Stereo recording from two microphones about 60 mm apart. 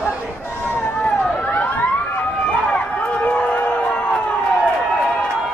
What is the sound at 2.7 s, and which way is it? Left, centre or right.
Run, left.